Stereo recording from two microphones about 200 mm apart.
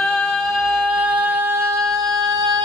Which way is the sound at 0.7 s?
10° right (ahead or behind).